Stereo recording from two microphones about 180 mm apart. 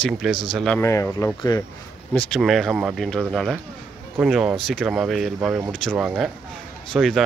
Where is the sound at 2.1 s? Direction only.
5° left (ahead or behind).